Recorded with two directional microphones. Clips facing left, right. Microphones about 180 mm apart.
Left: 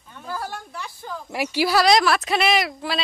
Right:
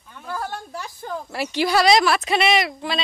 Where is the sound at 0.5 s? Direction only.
35° right (ahead or behind).